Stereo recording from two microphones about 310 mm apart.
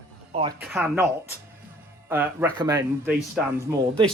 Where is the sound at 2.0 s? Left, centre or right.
Centre.